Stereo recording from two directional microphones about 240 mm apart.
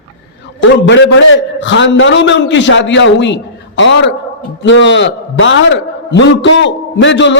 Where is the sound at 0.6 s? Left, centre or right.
Left.